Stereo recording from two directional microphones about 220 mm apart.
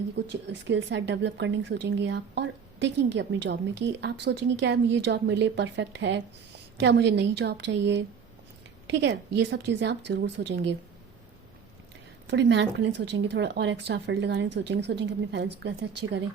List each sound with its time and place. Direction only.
0.3 s speech: 55° right (ahead or behind)
12.3 s speech: 55° right (ahead or behind)